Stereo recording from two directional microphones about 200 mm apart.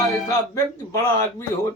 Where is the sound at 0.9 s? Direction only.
15° left (ahead or behind).